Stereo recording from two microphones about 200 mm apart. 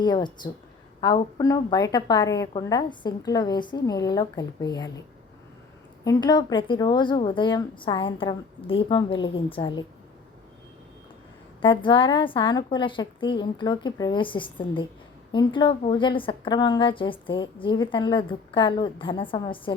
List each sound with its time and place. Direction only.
0.0 s a woman's voice: 20° left (ahead or behind)
6.1 s a woman's voice: 20° left (ahead or behind)
11.6 s a woman's voice: 25° left (ahead or behind)